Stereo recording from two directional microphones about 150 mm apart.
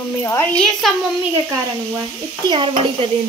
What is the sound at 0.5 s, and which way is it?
Speech, centre (ahead or behind).